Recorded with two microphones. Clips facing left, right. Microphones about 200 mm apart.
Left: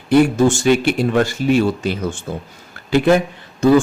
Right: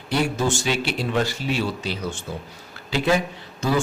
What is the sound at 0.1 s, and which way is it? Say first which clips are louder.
Speech: left 10 dB; 50° left (ahead or behind).